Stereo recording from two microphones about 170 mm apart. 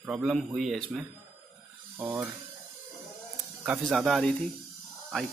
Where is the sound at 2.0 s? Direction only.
10° right (ahead or behind).